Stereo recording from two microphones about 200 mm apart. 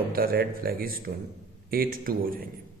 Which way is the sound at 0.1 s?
50° right (ahead or behind).